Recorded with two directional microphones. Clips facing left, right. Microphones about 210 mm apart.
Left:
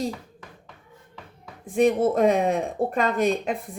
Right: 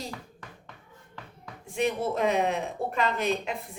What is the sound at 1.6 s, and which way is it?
Speech, 50° left (ahead or behind).